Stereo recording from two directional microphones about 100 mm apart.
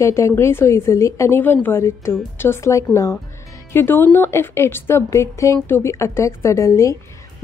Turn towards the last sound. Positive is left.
turn(degrees=30)  # may be behind; listen again after turning